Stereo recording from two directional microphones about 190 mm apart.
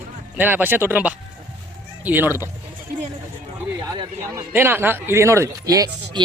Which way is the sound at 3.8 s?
20° right (ahead or behind).